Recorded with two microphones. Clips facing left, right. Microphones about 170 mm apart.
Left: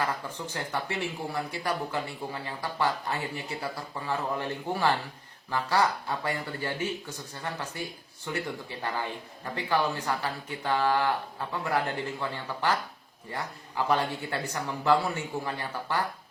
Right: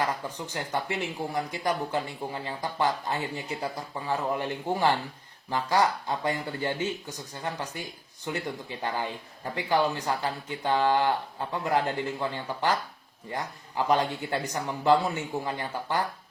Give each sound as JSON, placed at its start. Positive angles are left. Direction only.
{"t": 0.3, "sound": "speech", "side_deg": -20}